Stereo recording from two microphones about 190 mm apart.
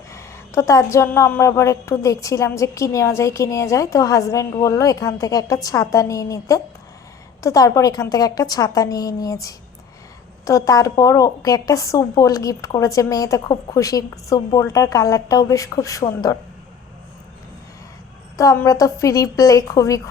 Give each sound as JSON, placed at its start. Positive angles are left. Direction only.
{"t": 0.1, "sound": "a woman's voice", "side_deg": 15}
{"t": 18.3, "sound": "a woman's voice", "side_deg": 15}